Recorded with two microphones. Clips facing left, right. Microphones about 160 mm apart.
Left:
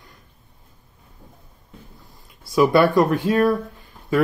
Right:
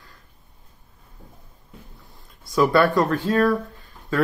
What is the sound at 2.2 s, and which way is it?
Speech, 10° left (ahead or behind).